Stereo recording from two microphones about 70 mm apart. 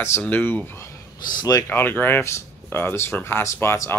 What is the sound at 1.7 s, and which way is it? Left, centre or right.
Speech, left.